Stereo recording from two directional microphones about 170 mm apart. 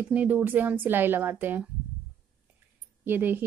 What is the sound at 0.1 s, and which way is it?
A woman's voice, 10° right (ahead or behind).